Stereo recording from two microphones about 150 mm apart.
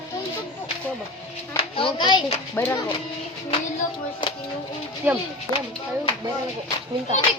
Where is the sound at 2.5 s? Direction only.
15° left (ahead or behind).